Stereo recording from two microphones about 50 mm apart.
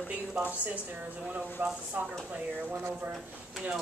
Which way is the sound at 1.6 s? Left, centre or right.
Right.